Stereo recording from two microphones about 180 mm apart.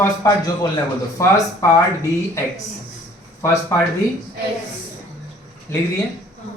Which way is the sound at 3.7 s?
15° left (ahead or behind).